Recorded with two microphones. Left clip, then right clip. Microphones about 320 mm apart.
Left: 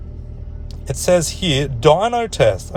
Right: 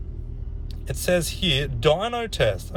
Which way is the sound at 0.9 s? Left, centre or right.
Left.